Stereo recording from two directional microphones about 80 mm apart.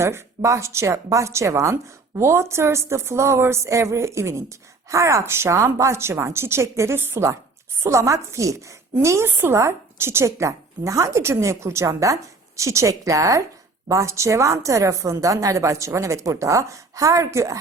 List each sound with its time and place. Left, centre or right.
0.0 s a woman's voice: right